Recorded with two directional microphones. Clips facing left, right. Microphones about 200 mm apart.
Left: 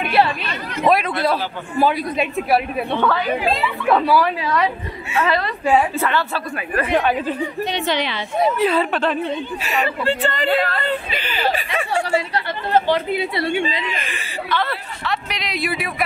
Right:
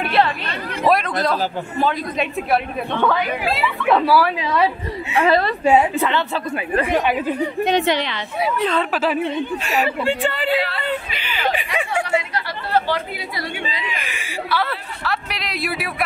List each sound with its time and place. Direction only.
0.8 s a man's voice: 5° left (ahead or behind)
3.0 s a woman's voice: 10° right (ahead or behind)
4.4 s a woman's voice: 20° right (ahead or behind)
8.5 s a man's voice: 10° left (ahead or behind)
8.9 s a woman's voice: 5° right (ahead or behind)
10.5 s speech: 45° left (ahead or behind)
11.5 s speech: 15° right (ahead or behind)
12.7 s speech: 20° left (ahead or behind)
13.9 s speech: 10° right (ahead or behind)